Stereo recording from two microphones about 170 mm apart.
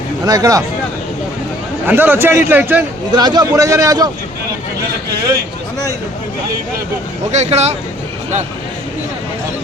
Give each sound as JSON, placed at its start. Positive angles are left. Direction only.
{"t": 0.3, "sound": "a man's voice", "side_deg": -20}
{"t": 1.9, "sound": "a man's voice", "side_deg": -10}
{"t": 3.1, "sound": "a man's voice", "side_deg": -25}
{"t": 7.3, "sound": "speech", "side_deg": -40}